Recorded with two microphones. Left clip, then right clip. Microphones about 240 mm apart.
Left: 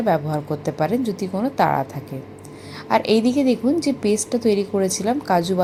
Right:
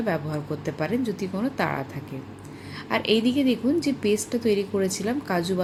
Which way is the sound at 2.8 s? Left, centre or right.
Centre.